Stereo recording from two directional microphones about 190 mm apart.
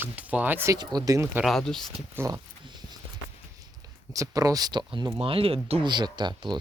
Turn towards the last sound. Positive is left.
turn(degrees=-25)  # may be behind; listen again after turning